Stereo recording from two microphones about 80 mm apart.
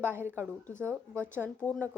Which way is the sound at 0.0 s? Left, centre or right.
Right.